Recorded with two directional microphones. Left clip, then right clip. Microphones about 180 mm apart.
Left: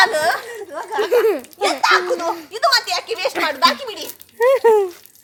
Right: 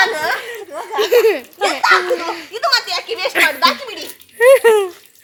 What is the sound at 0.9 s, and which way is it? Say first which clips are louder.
Speech: right 3 dB; 65° left (ahead or behind).